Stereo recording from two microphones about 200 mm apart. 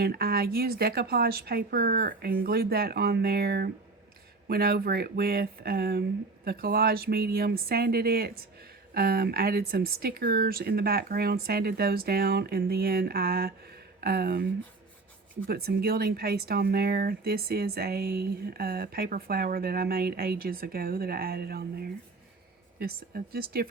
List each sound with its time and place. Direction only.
0.0 s speech: 50° right (ahead or behind)